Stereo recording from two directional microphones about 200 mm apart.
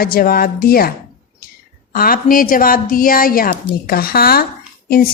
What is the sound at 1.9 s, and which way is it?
A woman's voice, 45° left (ahead or behind).